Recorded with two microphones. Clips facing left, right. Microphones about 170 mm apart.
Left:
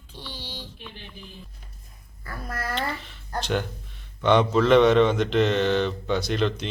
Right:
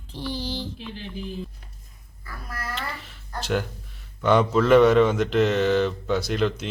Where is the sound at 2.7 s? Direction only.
5° right (ahead or behind).